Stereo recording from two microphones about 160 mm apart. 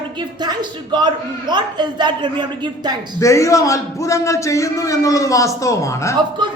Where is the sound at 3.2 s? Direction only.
20° left (ahead or behind).